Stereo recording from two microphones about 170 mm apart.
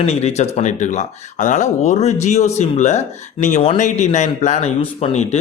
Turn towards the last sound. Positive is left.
turn(degrees=40)  # may be behind; listen again after turning